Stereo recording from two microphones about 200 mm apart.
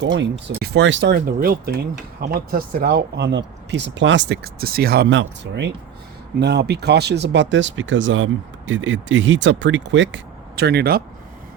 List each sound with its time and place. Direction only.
0.0 s speech: 65° right (ahead or behind)